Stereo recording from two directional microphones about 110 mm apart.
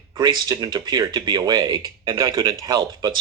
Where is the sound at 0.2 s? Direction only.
40° right (ahead or behind).